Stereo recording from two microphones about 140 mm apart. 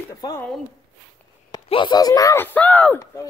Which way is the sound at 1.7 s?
35° left (ahead or behind).